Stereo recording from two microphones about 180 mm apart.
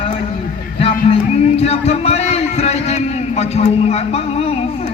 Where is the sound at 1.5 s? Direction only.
35° left (ahead or behind).